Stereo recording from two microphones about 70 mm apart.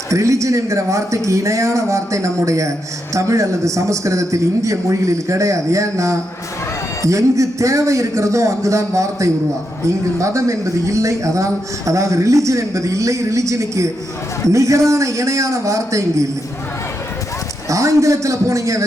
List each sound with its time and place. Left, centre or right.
0.1 s a man's voice: right
17.7 s a man's voice: right